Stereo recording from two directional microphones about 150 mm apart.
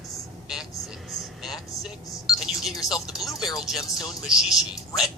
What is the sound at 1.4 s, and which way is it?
Speech, centre (ahead or behind).